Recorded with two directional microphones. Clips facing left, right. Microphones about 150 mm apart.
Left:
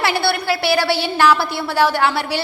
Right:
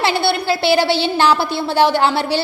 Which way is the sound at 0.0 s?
25° right (ahead or behind).